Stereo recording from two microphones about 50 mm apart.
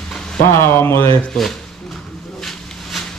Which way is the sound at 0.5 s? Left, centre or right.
Left.